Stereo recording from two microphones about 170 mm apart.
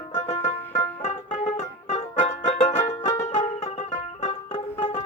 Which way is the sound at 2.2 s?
40° left (ahead or behind).